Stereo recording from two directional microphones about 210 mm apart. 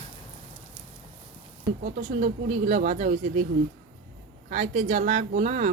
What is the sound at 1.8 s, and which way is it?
Speech, 40° right (ahead or behind).